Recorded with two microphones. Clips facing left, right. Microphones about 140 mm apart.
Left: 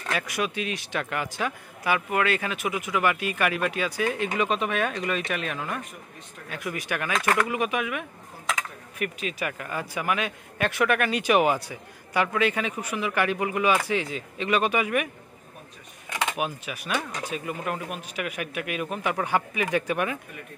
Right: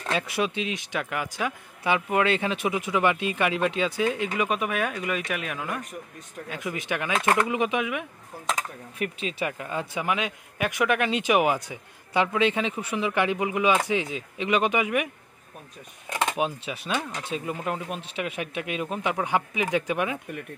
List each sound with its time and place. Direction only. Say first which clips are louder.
0.0 s speech: right 2 dB; 25° right (ahead or behind)
1.8 s speech: right 1 dB; 20° right (ahead or behind)
16.3 s speech: right 2 dB; 25° right (ahead or behind)